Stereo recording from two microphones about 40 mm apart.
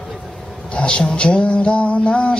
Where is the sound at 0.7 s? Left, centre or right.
Left.